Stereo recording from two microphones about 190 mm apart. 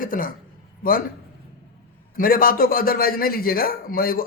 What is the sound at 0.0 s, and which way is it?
Speech, 45° left (ahead or behind).